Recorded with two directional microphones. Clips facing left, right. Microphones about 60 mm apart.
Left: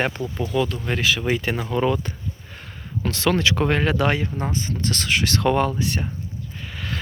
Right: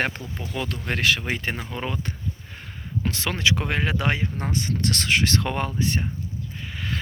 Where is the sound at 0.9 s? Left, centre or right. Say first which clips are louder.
Left 1 dB; right.